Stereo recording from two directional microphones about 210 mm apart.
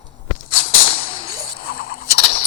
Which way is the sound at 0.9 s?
25° left (ahead or behind).